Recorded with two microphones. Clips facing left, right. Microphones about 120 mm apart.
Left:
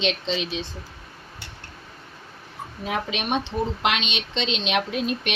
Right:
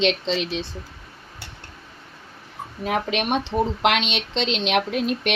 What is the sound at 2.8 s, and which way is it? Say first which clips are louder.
Speech: right 4 dB; 80° right.